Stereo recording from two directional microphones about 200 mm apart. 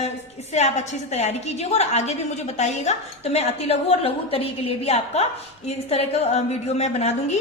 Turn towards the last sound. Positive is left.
turn(degrees=30)  # may be behind; listen again after turning